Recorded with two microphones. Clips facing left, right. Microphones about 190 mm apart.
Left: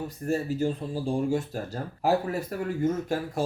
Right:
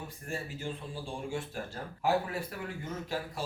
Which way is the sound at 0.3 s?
40° left (ahead or behind).